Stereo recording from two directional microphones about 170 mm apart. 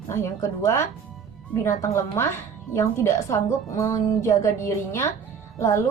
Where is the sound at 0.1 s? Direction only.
15° left (ahead or behind).